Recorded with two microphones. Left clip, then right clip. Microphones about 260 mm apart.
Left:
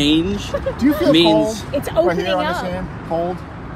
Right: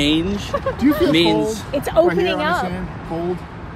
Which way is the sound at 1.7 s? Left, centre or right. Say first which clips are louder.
Right 1 dB; right.